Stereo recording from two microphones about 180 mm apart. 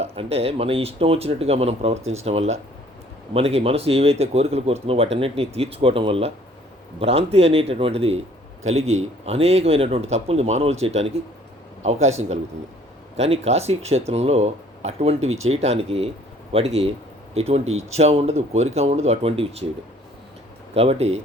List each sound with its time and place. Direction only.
0.0 s speech: 35° right (ahead or behind)
20.7 s speech: 35° right (ahead or behind)